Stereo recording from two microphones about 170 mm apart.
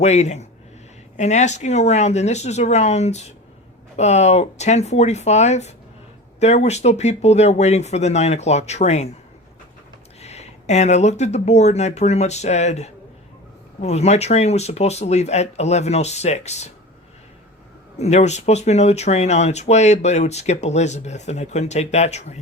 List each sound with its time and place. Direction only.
0.0 s speech: 40° left (ahead or behind)
10.2 s speech: 40° left (ahead or behind)
18.0 s speech: 40° left (ahead or behind)